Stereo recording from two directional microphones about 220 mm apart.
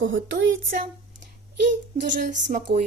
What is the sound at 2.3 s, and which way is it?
Speech, 35° right (ahead or behind).